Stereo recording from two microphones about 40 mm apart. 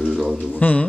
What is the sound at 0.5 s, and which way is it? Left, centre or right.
Speech, left.